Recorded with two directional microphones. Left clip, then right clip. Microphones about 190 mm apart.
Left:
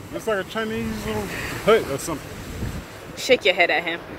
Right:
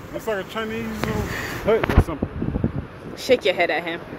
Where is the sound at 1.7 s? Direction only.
45° left (ahead or behind).